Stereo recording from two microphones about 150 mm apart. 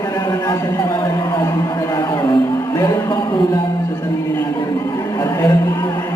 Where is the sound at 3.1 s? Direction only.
30° left (ahead or behind).